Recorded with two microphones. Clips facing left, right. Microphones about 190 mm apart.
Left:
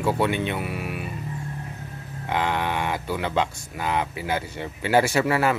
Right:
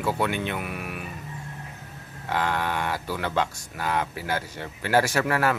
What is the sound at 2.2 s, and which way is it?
Speech, 15° left (ahead or behind).